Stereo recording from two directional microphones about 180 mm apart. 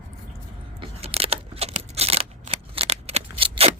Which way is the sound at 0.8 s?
35° right (ahead or behind).